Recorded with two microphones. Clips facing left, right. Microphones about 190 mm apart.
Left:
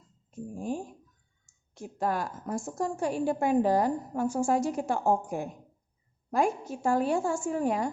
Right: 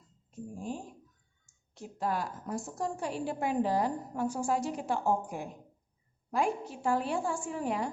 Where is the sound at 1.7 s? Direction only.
50° left (ahead or behind).